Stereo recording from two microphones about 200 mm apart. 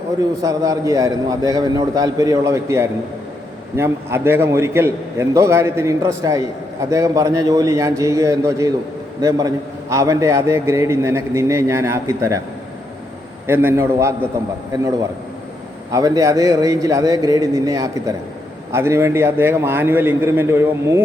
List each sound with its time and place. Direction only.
0.4 s a man's voice: 15° right (ahead or behind)
13.5 s a man's voice: 10° right (ahead or behind)
15.9 s a man's voice: 15° right (ahead or behind)